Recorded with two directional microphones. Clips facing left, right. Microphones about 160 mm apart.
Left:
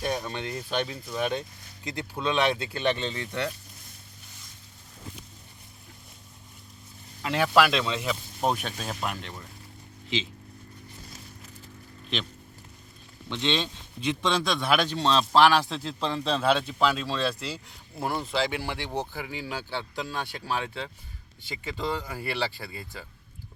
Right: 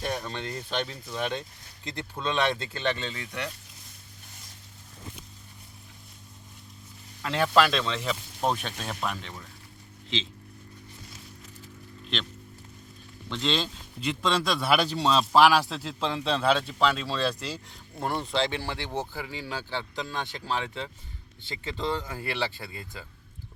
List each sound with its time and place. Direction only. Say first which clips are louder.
0.0 s speech: left 2 dB; 15° left (ahead or behind)
7.2 s speech: left 1 dB; 15° left (ahead or behind)
13.3 s speech: left 1 dB; centre (ahead or behind)